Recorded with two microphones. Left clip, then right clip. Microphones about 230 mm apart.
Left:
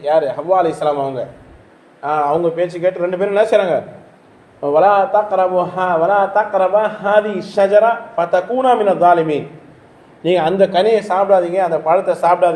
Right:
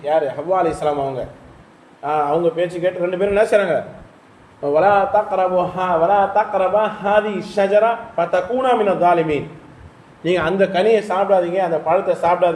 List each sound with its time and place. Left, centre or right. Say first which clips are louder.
0.0 s a man's voice: left 3 dB; left
10.2 s a man's voice: left 4 dB; centre